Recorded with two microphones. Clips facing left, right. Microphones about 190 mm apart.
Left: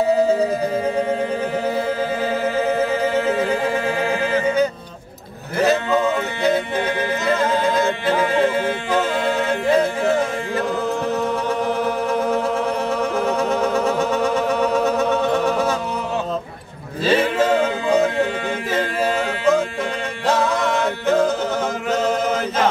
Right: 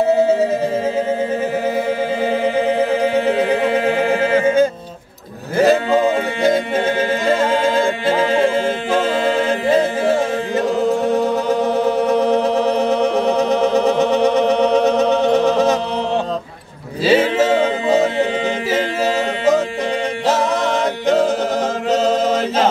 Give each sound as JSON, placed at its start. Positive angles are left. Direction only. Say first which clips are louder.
{"t": 3.4, "sound": "a capella", "louder": "right 4 dB", "side_deg": -20}
{"t": 5.6, "sound": "music", "louder": "right 4 dB", "side_deg": -30}
{"t": 7.8, "sound": "music", "louder": "right 2 dB", "side_deg": -25}
{"t": 11.4, "sound": "music", "louder": "right 4 dB", "side_deg": -25}
{"t": 17.0, "sound": "a sound", "louder": "right 3 dB", "side_deg": -5}